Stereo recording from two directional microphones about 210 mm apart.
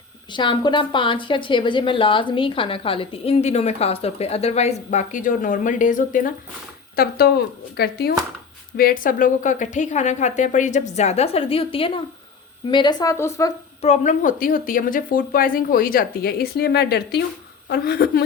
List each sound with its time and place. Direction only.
0.3 s a woman's voice: 20° left (ahead or behind)
13.8 s a woman's voice: 35° left (ahead or behind)